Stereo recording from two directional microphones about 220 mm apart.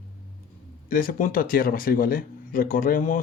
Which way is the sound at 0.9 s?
40° left (ahead or behind).